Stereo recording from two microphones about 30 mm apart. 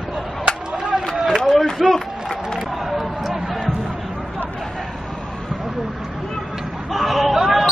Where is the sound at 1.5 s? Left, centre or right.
Centre.